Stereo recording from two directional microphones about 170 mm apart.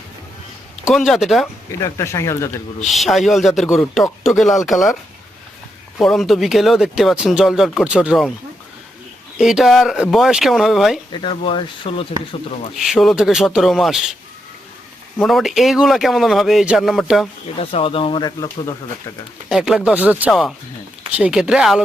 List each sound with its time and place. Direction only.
0.9 s speech: centre (ahead or behind)
2.0 s speech: 15° left (ahead or behind)
2.8 s speech: centre (ahead or behind)
6.0 s speech: centre (ahead or behind)
9.4 s speech: centre (ahead or behind)
11.1 s speech: 30° left (ahead or behind)
12.7 s speech: centre (ahead or behind)
15.2 s speech: centre (ahead or behind)
17.6 s speech: 35° left (ahead or behind)
19.5 s speech: 5° right (ahead or behind)